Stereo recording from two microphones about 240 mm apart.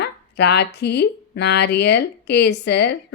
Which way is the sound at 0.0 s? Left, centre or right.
Left.